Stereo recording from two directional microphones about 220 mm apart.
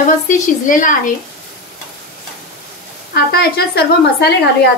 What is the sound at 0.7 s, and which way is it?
Speech, 35° left (ahead or behind).